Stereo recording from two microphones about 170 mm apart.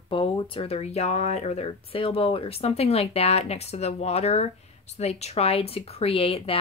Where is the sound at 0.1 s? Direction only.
30° left (ahead or behind).